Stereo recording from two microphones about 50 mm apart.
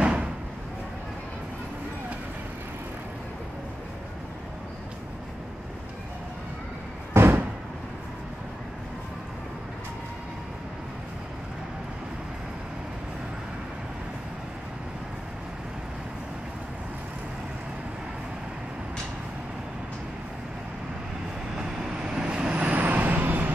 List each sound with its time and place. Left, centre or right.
0.0 s a sound: right
7.2 s door: right
21.5 s vehicle: centre; by 23.5 s right